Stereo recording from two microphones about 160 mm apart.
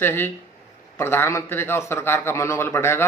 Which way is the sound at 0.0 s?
15° left (ahead or behind).